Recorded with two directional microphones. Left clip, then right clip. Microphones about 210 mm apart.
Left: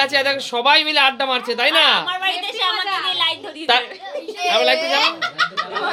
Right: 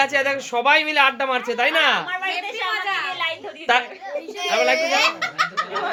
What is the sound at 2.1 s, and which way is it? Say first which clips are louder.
Speech: left 3 dB; 35° left (ahead or behind).